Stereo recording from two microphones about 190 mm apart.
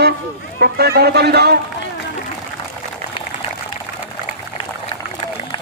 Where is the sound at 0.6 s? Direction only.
60° right (ahead or behind).